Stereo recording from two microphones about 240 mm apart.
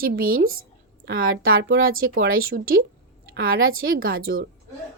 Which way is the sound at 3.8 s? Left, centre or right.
Right.